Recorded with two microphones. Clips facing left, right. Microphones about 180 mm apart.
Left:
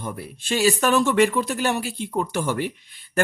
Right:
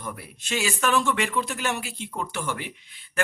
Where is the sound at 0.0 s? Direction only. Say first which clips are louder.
Left 4 dB; 30° left (ahead or behind).